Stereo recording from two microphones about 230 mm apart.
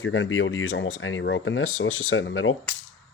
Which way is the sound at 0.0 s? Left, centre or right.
Left.